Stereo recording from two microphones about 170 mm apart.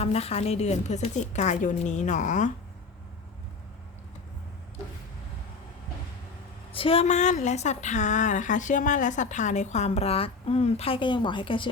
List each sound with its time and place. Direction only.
0.0 s speech: 35° left (ahead or behind)
6.7 s speech: 35° left (ahead or behind)